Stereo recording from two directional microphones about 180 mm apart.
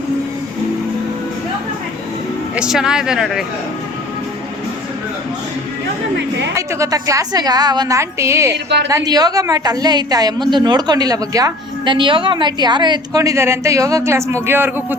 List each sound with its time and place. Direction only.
2.6 s speech: 5° right (ahead or behind)
6.6 s a woman's voice: 20° right (ahead or behind)